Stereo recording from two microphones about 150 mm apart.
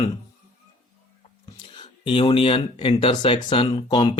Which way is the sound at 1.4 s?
35° left (ahead or behind).